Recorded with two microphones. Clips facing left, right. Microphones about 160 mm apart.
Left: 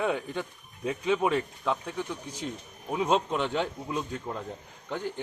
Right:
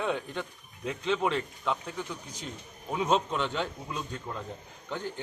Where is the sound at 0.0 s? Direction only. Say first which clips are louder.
Left 2 dB; 10° left (ahead or behind).